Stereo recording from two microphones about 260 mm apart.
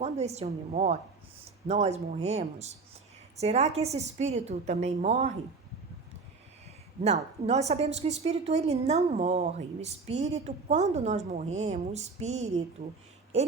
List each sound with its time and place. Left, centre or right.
0.0 s a woman's voice: right
7.4 s speech: right